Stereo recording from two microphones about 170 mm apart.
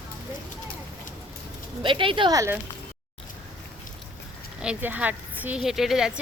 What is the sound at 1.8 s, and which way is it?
Speech, 30° right (ahead or behind).